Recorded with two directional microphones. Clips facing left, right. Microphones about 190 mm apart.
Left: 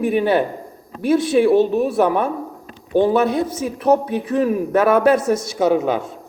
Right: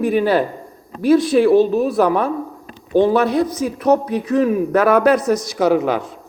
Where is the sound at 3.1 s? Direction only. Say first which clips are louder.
Right 1 dB; 25° left (ahead or behind).